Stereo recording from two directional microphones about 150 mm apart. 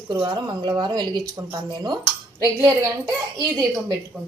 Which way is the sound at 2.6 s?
15° right (ahead or behind).